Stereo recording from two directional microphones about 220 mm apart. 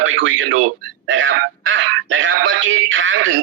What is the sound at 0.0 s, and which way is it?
Speech, 60° right (ahead or behind).